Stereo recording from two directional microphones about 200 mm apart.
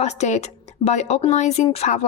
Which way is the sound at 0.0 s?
35° left (ahead or behind).